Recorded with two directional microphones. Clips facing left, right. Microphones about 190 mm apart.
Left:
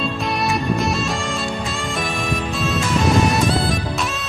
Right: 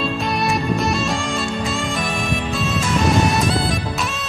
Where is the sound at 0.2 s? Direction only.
Centre (ahead or behind).